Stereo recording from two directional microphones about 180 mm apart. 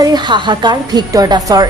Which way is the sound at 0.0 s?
25° right (ahead or behind).